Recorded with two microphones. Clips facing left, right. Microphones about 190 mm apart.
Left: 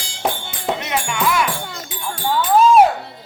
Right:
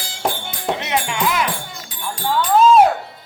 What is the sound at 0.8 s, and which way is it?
Music, 20° right (ahead or behind).